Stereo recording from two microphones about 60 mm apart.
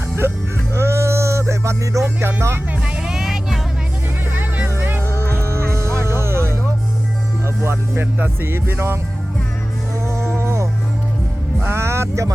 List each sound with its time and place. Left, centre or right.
0.7 s music: right
2.2 s music: right
2.8 s music: centre
4.8 s music: right
5.4 s music: right
7.4 s speech: right
10.1 s livestock: right
11.6 s speech: right